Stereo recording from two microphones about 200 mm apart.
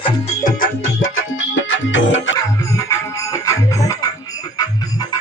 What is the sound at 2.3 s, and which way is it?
Music, 15° left (ahead or behind).